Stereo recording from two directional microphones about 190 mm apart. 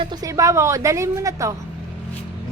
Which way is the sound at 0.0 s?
20° right (ahead or behind).